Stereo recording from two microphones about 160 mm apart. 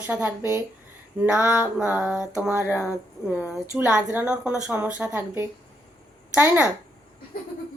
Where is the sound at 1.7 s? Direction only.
10° right (ahead or behind).